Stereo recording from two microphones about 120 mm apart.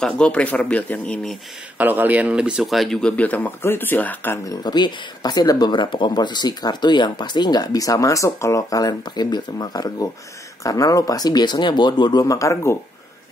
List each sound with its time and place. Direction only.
0.0 s speech: 10° left (ahead or behind)
1.8 s speech: 15° right (ahead or behind); by 4.4 s 15° left (ahead or behind)
4.5 s speech: 35° left (ahead or behind)